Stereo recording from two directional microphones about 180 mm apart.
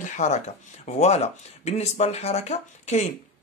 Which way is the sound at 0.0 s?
45° left (ahead or behind).